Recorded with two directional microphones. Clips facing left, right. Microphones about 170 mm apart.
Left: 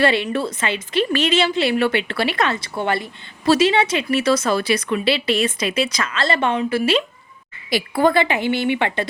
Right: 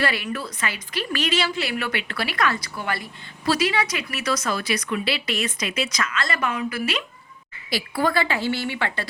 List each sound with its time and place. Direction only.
0.0 s a woman's voice: 25° left (ahead or behind)